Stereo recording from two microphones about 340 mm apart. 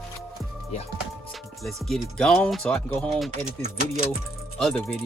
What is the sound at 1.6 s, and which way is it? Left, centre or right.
Speech, centre.